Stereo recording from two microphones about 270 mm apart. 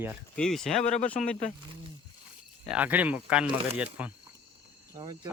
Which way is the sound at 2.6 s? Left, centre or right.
Centre.